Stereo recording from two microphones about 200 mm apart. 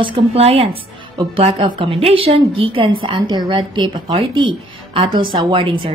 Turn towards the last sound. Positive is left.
turn(degrees=-25)  # may be behind; listen again after turning